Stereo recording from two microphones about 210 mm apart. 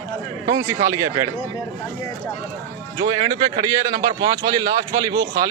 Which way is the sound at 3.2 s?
20° right (ahead or behind).